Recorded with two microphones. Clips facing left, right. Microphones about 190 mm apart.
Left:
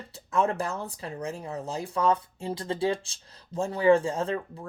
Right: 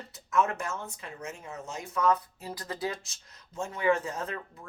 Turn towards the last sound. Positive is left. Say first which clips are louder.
# left 7 dB
turn(degrees=30)  # may be behind; listen again after turning